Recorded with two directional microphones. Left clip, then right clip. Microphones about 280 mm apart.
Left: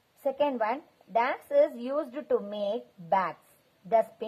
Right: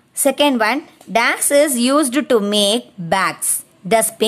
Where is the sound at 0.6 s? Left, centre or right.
Right.